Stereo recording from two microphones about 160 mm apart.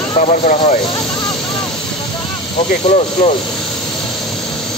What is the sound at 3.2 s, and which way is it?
Speech, 55° left (ahead or behind).